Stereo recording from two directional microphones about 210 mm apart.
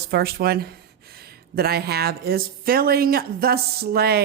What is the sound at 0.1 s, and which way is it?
Speech, 45° right (ahead or behind).